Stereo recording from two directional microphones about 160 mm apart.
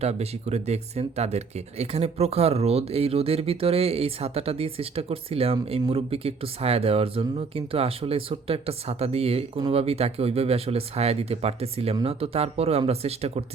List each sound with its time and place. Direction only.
0.0 s speech: 40° right (ahead or behind)